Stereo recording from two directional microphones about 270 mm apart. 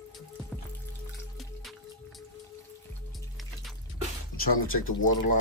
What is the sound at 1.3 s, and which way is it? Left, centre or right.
Music, centre.